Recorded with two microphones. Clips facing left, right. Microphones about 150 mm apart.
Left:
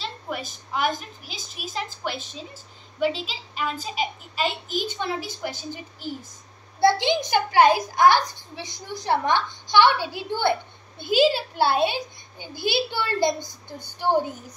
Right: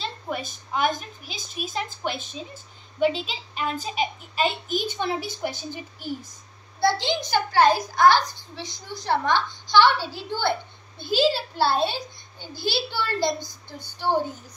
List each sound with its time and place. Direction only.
0.3 s a woman's voice: 20° right (ahead or behind)
6.8 s a child's voice: 15° left (ahead or behind)
11.0 s a child's voice: 50° left (ahead or behind)
11.5 s a child's voice: 15° left (ahead or behind)